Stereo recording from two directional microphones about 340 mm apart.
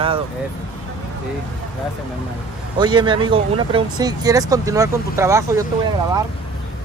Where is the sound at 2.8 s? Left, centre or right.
Centre.